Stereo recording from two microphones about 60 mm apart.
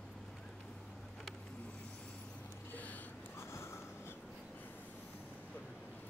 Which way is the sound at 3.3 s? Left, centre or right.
Left.